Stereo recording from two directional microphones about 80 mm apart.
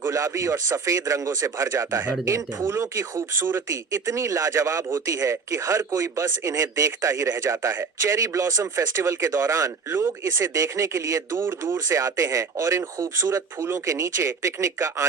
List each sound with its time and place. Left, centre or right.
0.0 s a man's voice: right